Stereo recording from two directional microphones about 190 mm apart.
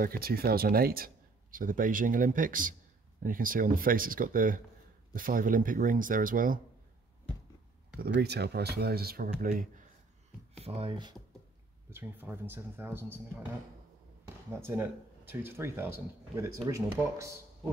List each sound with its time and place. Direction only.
0.0 s speech: 50° right (ahead or behind)
8.0 s speech: 60° right (ahead or behind)
10.6 s speech: 30° right (ahead or behind)
11.9 s speech: 10° right (ahead or behind)
14.5 s speech: 15° right (ahead or behind)